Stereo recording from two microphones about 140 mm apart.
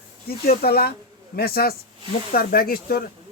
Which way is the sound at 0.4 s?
90° left.